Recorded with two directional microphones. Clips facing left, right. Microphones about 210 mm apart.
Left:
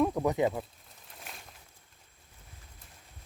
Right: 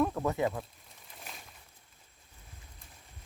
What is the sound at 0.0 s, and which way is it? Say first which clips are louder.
Speech: left 3 dB; 15° left (ahead or behind).